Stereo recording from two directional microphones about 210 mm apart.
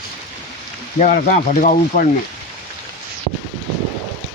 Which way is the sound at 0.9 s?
35° left (ahead or behind).